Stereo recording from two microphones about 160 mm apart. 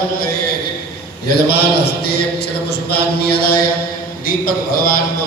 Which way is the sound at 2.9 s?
80° left.